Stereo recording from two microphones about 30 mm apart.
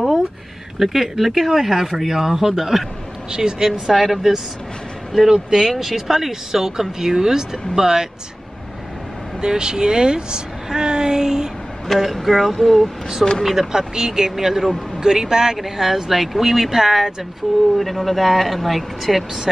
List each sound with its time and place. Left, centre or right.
0.8 s speech: centre
3.3 s speech: right
3.8 s speech: centre
9.4 s speech: right
12.0 s speech: centre
13.7 s speech: centre
14.3 s speech: centre
15.5 s speech: centre